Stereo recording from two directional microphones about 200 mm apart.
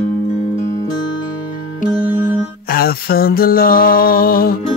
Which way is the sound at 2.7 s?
50° left (ahead or behind).